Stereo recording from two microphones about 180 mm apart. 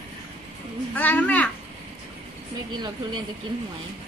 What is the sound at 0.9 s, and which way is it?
Speech, 10° left (ahead or behind).